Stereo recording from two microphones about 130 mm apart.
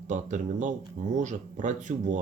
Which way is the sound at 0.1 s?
70° right (ahead or behind).